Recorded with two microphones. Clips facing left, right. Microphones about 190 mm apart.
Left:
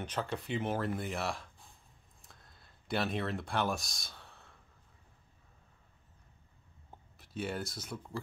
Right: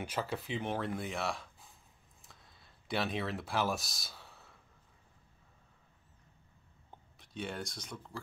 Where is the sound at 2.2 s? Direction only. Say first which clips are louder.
Even; centre (ahead or behind).